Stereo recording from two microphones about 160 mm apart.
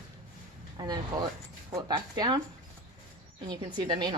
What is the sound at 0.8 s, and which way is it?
Speech, 25° right (ahead or behind).